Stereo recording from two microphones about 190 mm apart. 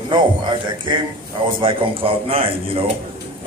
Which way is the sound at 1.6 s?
30° right (ahead or behind).